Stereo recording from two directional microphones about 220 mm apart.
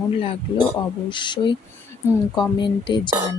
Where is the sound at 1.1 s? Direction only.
20° left (ahead or behind).